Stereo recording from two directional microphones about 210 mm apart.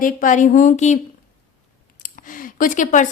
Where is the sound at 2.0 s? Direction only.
40° left (ahead or behind).